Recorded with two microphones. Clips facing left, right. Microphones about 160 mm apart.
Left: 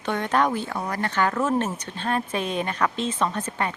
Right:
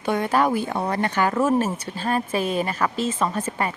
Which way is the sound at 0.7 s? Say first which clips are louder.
Right 4 dB; 30° right (ahead or behind).